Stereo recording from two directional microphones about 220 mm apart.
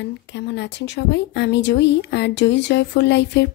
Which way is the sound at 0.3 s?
55° left (ahead or behind).